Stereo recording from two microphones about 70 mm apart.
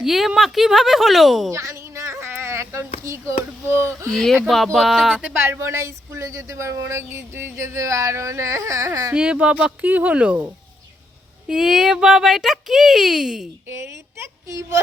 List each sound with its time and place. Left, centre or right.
0.0 s speech: centre
1.5 s a sound: right
3.7 s speech: right
4.1 s speech: centre
5.5 s speech: right
9.1 s speech: centre
11.4 s speech: centre
13.7 s speech: right